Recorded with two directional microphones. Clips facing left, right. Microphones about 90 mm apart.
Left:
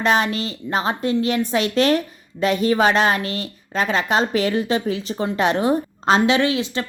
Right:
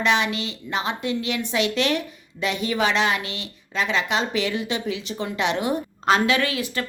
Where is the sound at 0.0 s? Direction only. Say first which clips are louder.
Left 3 dB; 40° left (ahead or behind).